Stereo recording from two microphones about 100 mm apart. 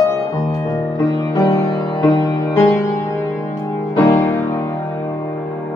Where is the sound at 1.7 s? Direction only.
45° left (ahead or behind); by 4.8 s 20° left (ahead or behind).